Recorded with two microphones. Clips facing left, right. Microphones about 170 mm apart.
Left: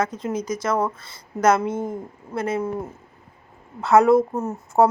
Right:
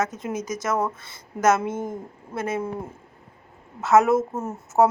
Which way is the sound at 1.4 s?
20° right (ahead or behind).